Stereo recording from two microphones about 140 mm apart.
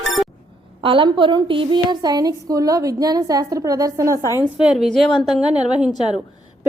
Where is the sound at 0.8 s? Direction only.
40° right (ahead or behind).